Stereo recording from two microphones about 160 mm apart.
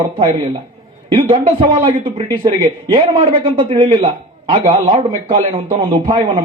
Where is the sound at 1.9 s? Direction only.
35° right (ahead or behind).